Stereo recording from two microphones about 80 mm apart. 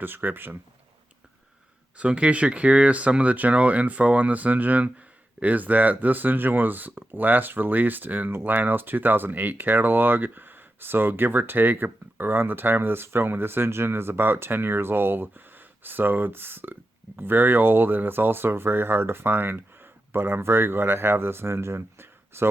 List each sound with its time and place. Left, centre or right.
0.0 s speech: right
2.0 s speech: centre; by 22.4 s right